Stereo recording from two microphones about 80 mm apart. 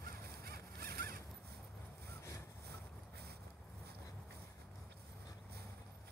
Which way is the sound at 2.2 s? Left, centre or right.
Left.